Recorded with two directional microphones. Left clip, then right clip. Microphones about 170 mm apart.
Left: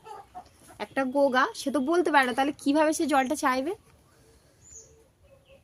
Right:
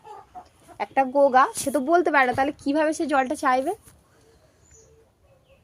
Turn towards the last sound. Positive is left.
turn(degrees=15)  # may be behind; listen again after turning